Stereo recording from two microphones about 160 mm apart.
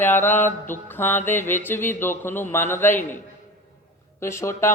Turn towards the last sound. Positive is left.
turn(degrees=15)  # may be behind; listen again after turning